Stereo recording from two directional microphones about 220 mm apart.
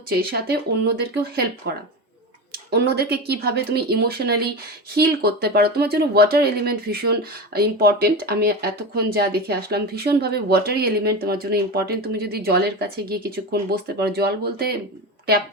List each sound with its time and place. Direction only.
0.1 s speech: 45° right (ahead or behind)